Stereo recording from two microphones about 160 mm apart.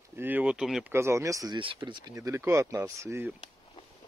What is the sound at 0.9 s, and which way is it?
Speech, 15° right (ahead or behind).